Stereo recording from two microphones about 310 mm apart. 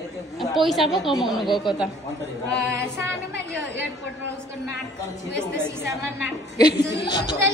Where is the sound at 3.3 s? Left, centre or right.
Right.